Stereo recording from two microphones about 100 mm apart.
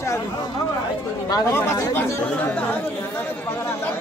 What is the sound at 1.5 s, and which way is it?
Speech, 20° left (ahead or behind).